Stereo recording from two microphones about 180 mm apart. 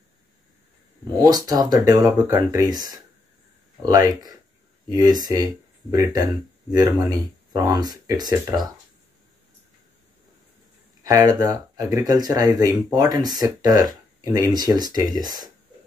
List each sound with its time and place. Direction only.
1.2 s speech: 20° right (ahead or behind)
11.1 s speech: 20° right (ahead or behind)